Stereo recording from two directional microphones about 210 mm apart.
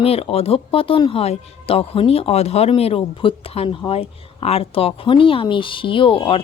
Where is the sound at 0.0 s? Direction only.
30° left (ahead or behind).